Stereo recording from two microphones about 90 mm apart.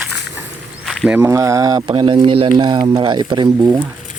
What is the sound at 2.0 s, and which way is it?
Speech, 65° right (ahead or behind).